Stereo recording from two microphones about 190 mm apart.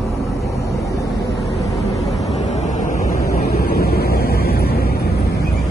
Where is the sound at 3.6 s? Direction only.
55° left (ahead or behind).